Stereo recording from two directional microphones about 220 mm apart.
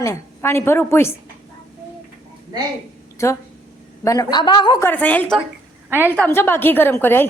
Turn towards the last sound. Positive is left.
turn(degrees=10)  # may be behind; listen again after turning